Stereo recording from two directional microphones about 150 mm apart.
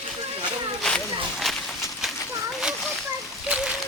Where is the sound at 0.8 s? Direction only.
5° left (ahead or behind).